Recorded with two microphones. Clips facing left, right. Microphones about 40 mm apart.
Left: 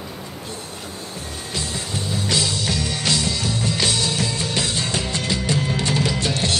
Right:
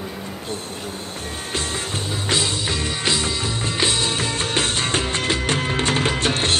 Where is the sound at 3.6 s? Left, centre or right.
Right.